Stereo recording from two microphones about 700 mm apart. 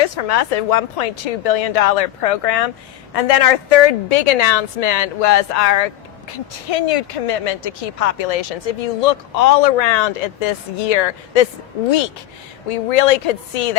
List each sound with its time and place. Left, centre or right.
0.0 s speech: left
6.7 s speech: left
12.6 s speech: left